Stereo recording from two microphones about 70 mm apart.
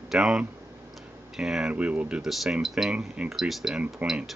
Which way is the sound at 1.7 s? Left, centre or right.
Centre.